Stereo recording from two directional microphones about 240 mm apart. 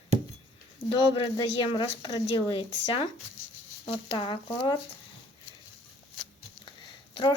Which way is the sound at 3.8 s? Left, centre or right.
Left.